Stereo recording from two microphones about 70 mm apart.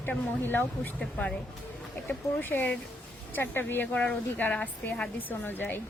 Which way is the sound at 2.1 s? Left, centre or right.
Left.